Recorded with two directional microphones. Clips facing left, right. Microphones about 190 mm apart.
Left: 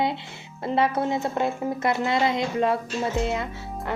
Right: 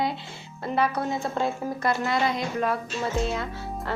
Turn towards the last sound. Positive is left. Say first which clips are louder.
# left 2 dB
turn(degrees=20)  # may be behind; listen again after turning